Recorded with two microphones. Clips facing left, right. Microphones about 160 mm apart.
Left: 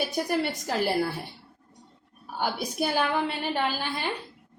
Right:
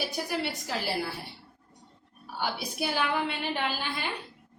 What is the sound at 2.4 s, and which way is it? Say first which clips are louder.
A woman's voice: left 4 dB; 45° left (ahead or behind).